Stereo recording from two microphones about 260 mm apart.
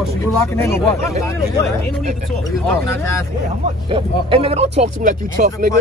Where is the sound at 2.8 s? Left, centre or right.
Centre.